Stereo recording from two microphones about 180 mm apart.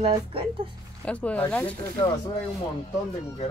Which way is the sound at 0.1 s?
30° right (ahead or behind).